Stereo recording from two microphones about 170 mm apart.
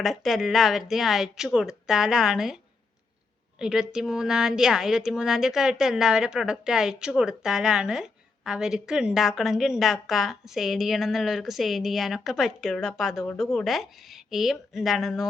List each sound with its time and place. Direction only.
0.0 s a woman's voice: centre (ahead or behind)
3.6 s a woman's voice: 5° right (ahead or behind)